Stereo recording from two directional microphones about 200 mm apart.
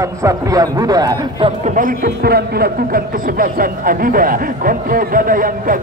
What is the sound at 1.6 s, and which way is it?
A man's voice, 40° right (ahead or behind).